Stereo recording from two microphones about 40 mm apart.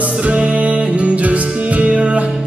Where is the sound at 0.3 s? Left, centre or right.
Right.